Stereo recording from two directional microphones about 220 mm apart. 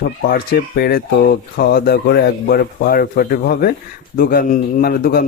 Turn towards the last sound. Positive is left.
turn(degrees=40)  # may be behind; listen again after turning